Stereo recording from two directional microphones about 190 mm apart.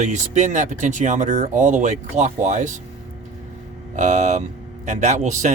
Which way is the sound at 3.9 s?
40° right (ahead or behind).